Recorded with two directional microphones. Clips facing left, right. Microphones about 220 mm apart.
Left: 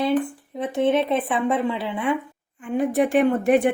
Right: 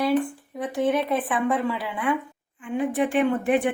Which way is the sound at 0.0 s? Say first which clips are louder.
Left 1 dB; 20° left (ahead or behind).